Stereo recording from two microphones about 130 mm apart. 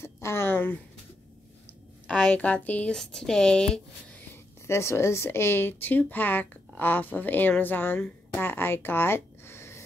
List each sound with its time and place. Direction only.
0.0 s a sound: 20° left (ahead or behind)
2.0 s speech: 10° left (ahead or behind)
4.3 s speech: 20° left (ahead or behind)